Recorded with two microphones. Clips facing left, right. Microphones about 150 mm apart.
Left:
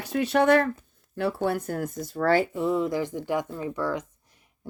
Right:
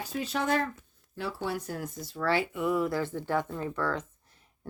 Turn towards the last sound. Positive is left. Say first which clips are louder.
# left 3 dB
turn(degrees=15)  # may be behind; listen again after turning